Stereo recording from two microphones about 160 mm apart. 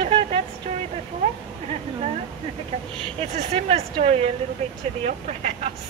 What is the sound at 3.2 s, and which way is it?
A woman's voice, 40° right (ahead or behind).